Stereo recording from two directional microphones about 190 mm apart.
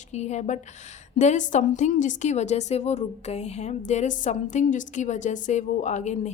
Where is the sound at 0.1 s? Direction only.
35° left (ahead or behind).